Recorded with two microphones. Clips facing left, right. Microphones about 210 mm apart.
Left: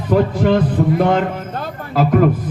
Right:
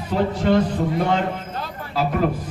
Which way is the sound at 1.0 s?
55° left (ahead or behind).